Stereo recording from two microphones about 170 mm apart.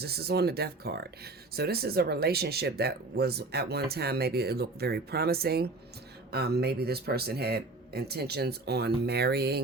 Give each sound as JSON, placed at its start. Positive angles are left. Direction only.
{"t": 0.0, "sound": "speech", "side_deg": -70}